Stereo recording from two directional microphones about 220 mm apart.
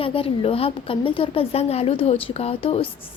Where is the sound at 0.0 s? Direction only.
25° left (ahead or behind).